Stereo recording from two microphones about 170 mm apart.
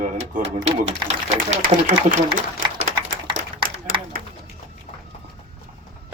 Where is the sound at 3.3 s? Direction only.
30° right (ahead or behind).